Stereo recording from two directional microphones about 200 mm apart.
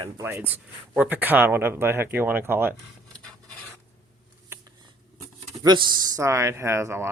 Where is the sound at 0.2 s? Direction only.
10° right (ahead or behind).